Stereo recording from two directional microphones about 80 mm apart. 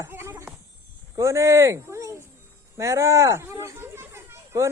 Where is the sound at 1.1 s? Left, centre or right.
Right.